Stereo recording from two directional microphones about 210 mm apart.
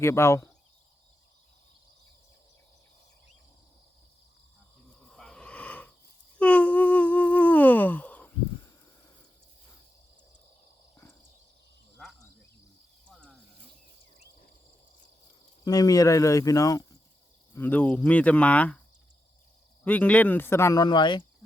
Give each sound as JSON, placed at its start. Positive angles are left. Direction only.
{"t": 0.0, "sound": "speech", "side_deg": 10}
{"t": 5.0, "sound": "wild animals", "side_deg": 0}
{"t": 6.4, "sound": "humming", "side_deg": 5}
{"t": 10.9, "sound": "a sound", "side_deg": 10}
{"t": 13.1, "sound": "snake", "side_deg": 5}
{"t": 15.6, "sound": "speech", "side_deg": 20}
{"t": 19.8, "sound": "speech", "side_deg": 5}